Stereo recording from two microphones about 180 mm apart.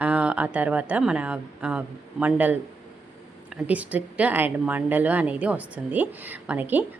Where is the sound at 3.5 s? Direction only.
10° right (ahead or behind).